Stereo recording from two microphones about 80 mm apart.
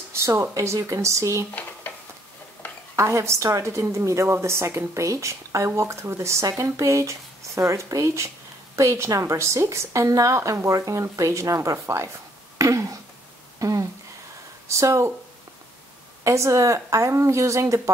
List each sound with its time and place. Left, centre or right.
0.1 s a woman's voice: right
2.6 s a sound: centre
3.0 s a woman's voice: right
12.5 s a sound: right
14.8 s a woman's voice: right
16.3 s a woman's voice: right